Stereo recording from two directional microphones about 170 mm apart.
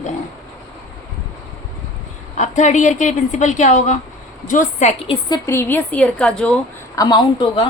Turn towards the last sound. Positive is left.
turn(degrees=25)  # may be behind; listen again after turning